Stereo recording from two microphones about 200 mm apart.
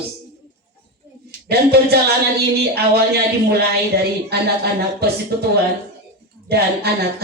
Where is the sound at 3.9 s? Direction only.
55° right (ahead or behind).